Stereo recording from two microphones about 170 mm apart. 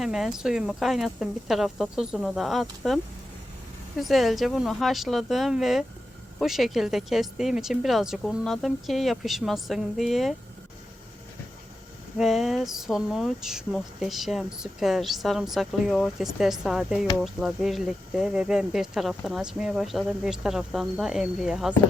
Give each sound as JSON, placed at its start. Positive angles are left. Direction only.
{"t": 0.0, "sound": "speech", "side_deg": 0}
{"t": 12.1, "sound": "speech", "side_deg": 0}